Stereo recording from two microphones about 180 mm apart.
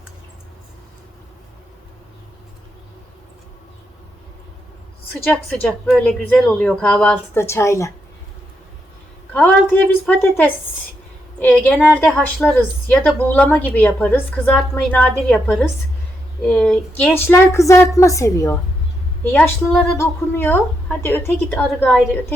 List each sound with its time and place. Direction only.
5.6 s speech: 5° left (ahead or behind)
9.3 s a woman's voice: 5° left (ahead or behind)